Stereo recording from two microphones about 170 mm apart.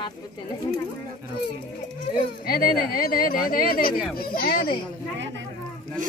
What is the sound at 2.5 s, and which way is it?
Speech, 60° left (ahead or behind).